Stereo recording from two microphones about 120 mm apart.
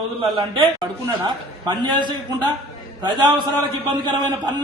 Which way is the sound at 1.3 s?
40° right (ahead or behind).